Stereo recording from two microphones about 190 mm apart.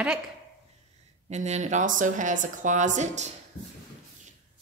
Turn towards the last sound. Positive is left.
turn(degrees=-40)  # may be behind; listen again after turning